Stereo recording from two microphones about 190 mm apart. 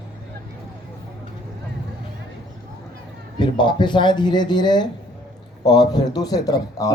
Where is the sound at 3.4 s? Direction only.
25° left (ahead or behind).